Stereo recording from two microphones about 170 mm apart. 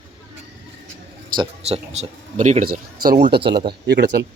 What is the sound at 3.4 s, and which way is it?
Speech, 30° right (ahead or behind).